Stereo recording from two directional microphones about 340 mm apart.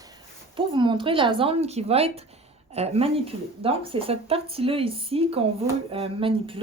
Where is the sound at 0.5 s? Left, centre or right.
Centre.